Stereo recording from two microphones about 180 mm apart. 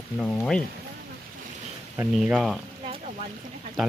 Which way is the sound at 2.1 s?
Centre (ahead or behind).